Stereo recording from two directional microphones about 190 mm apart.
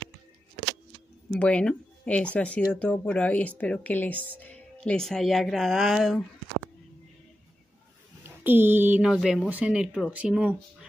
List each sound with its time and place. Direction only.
1.3 s speech: 5° left (ahead or behind)
8.2 s speech: 10° right (ahead or behind)